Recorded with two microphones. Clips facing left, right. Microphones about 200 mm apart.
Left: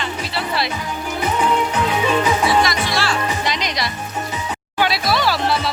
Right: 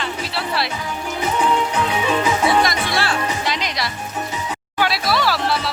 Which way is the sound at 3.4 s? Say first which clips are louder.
Left 1 dB; 5° right (ahead or behind).